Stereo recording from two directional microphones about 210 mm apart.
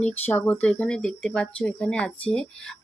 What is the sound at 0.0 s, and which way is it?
Speech, 10° left (ahead or behind).